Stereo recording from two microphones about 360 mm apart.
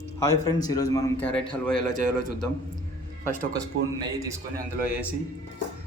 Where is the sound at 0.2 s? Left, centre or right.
Centre.